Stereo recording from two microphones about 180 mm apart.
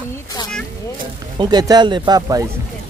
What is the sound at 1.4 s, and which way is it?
Speech, 20° right (ahead or behind).